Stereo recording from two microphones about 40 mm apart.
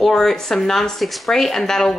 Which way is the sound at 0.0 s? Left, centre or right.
Centre.